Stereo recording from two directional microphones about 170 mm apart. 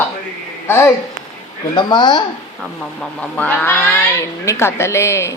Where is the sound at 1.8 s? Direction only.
25° left (ahead or behind).